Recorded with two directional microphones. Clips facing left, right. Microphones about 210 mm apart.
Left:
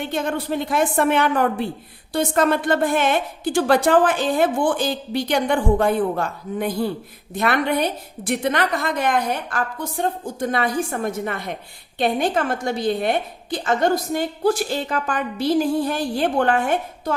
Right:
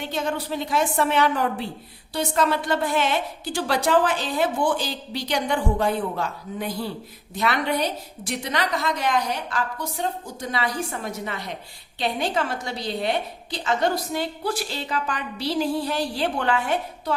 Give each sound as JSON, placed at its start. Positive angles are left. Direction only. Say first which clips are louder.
{"t": 0.0, "sound": "a woman's voice", "louder": "left 3 dB", "side_deg": 55}